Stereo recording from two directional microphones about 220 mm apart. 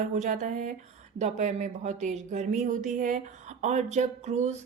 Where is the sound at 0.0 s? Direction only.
35° right (ahead or behind).